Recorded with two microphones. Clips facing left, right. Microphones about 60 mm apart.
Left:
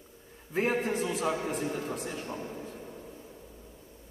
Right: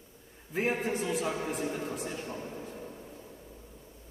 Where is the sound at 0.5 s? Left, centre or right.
Centre.